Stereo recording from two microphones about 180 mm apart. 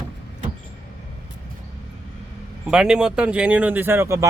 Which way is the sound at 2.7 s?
5° right (ahead or behind).